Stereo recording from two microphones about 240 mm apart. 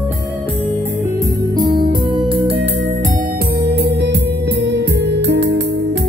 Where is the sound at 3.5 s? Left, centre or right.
Right.